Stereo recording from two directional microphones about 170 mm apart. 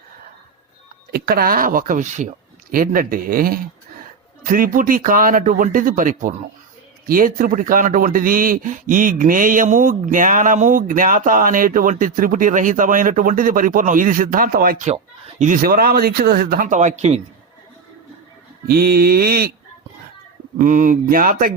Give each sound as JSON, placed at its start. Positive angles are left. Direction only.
{"t": 1.1, "sound": "speech", "side_deg": -60}
{"t": 2.7, "sound": "speech", "side_deg": -55}
{"t": 14.8, "sound": "speech", "side_deg": -45}
{"t": 18.7, "sound": "speech", "side_deg": -65}
{"t": 20.6, "sound": "speech", "side_deg": -50}